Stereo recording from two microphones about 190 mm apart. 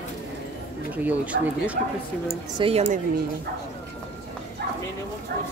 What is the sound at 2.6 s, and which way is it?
Speech, 30° right (ahead or behind).